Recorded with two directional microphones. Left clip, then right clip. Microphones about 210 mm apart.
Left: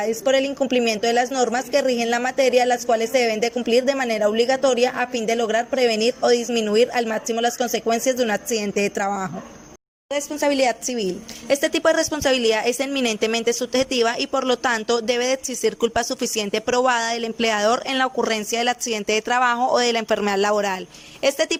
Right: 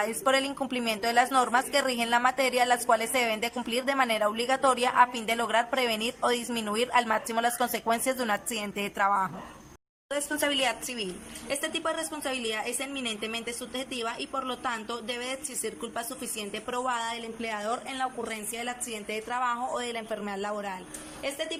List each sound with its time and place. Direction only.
0.0 s speech: 15° left (ahead or behind)
10.5 s a woman's voice: 25° left (ahead or behind)
11.4 s speech: 40° left (ahead or behind)